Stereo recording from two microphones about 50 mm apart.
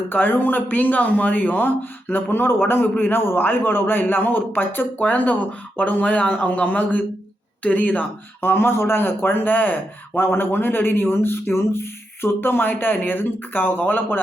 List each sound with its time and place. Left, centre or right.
0.1 s a man's voice: left
4.9 s a man's voice: left
8.4 s a man's voice: left